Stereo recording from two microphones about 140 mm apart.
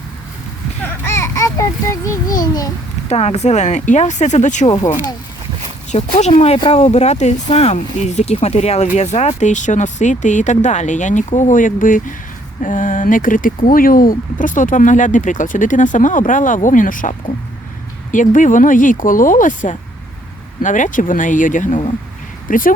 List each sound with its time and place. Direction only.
1.0 s a child's voice: 20° left (ahead or behind)
3.1 s speech: 50° left (ahead or behind)
4.7 s speech: 35° left (ahead or behind)
5.9 s speech: 55° left (ahead or behind); by 22.7 s 75° left (ahead or behind)